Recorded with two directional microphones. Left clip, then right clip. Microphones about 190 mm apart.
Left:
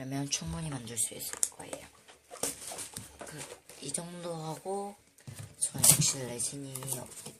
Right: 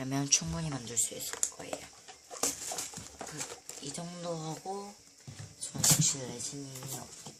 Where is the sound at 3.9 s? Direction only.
15° left (ahead or behind).